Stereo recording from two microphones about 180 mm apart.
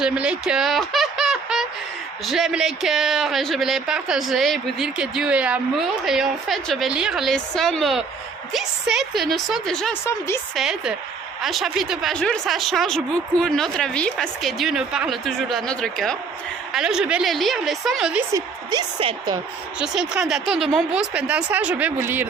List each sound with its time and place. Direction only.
0.0 s a sound: 5° right (ahead or behind)
2.2 s speech: centre (ahead or behind)
10.1 s a woman's voice: 15° left (ahead or behind)
10.5 s speech: centre (ahead or behind)
18.3 s a woman's voice: 20° right (ahead or behind)
19.8 s speech: 5° right (ahead or behind)